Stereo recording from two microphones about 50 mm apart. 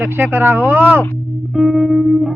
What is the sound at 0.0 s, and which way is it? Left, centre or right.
Speech, right.